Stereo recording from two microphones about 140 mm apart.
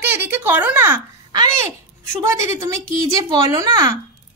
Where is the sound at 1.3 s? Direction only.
30° right (ahead or behind).